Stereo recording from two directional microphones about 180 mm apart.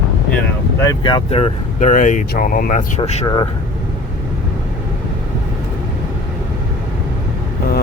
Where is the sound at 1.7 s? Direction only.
45° left (ahead or behind).